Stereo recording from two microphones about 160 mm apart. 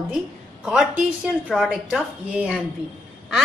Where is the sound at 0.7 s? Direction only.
5° right (ahead or behind).